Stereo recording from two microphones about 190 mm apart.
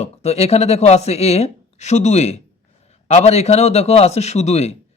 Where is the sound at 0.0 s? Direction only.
35° left (ahead or behind).